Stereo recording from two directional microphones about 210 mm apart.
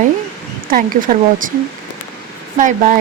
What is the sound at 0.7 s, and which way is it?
Speech, 40° right (ahead or behind).